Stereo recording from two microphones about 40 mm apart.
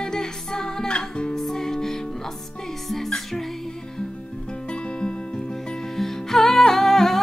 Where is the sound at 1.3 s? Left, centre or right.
Centre.